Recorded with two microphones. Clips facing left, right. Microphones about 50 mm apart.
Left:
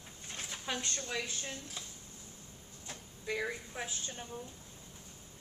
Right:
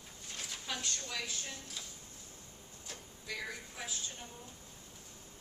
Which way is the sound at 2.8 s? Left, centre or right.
Left.